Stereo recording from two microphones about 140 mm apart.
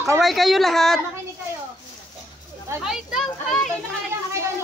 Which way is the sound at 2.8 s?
5° right (ahead or behind).